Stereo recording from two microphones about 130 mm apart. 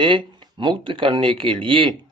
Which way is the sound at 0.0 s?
40° right (ahead or behind).